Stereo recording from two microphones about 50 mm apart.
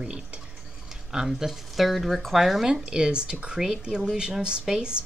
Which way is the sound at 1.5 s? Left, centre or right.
Centre.